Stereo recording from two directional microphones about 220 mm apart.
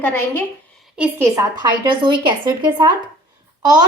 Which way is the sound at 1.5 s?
20° right (ahead or behind).